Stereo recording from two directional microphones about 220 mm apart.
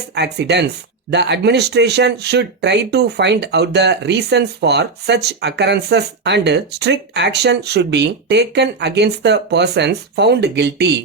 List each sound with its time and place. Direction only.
0.1 s speech: 50° right (ahead or behind)